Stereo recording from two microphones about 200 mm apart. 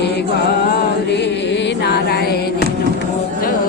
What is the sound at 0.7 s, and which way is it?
Music, 55° left (ahead or behind).